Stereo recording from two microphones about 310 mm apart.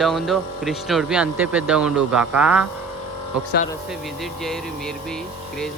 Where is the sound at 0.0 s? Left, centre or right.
Centre.